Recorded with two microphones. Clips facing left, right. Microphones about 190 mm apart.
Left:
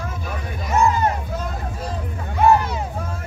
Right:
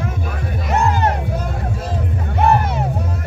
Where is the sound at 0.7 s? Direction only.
70° right (ahead or behind).